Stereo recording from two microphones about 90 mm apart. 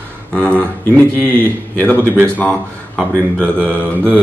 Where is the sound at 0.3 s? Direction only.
15° left (ahead or behind).